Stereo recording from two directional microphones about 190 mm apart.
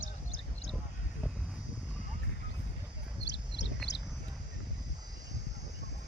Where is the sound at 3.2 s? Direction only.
65° left (ahead or behind).